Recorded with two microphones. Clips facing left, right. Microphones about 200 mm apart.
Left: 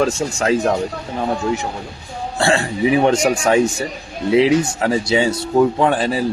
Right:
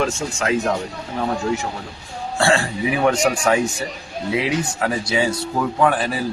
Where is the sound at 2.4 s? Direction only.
20° left (ahead or behind).